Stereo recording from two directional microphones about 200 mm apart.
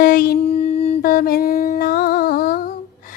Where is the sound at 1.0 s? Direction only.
45° left (ahead or behind).